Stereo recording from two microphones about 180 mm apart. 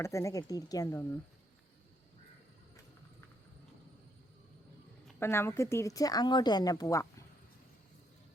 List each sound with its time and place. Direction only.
0.0 s speech: 15° left (ahead or behind)
5.2 s a woman's voice: 15° left (ahead or behind)